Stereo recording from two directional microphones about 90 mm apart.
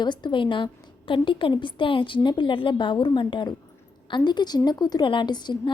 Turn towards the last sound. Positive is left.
turn(degrees=55)  # may be behind; listen again after turning